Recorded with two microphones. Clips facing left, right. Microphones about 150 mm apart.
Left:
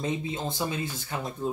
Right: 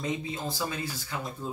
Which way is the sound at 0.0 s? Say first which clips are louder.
Left 2 dB; 25° left (ahead or behind).